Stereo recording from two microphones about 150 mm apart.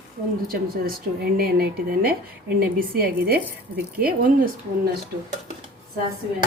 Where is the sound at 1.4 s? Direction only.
85° right.